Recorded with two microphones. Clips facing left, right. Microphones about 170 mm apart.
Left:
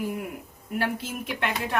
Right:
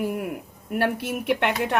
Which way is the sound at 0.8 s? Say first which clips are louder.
Right 5 dB; 65° right (ahead or behind).